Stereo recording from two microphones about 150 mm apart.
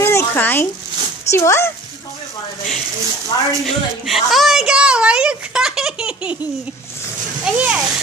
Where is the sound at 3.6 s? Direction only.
Centre (ahead or behind).